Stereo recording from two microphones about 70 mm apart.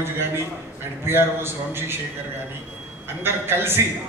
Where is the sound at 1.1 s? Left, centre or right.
Right.